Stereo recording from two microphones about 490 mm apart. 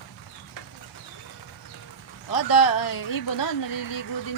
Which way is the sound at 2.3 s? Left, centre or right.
Left.